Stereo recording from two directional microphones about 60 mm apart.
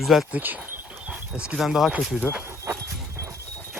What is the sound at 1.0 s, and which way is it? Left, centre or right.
Dog, centre.